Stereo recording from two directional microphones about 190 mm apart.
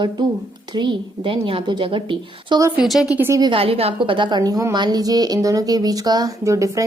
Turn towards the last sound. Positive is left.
turn(degrees=-15)  # may be behind; listen again after turning